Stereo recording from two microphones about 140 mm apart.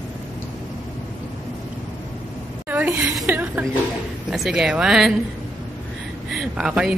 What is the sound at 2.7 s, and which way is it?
A woman's voice, 10° right (ahead or behind).